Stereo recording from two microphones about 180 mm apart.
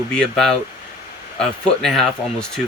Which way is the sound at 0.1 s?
5° left (ahead or behind).